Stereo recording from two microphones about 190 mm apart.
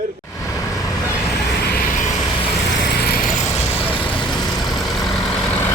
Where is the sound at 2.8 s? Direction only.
55° left (ahead or behind).